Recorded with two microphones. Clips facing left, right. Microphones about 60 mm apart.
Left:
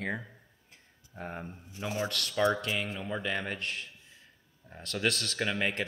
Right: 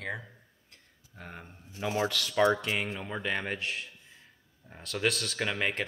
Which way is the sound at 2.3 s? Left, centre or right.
Right.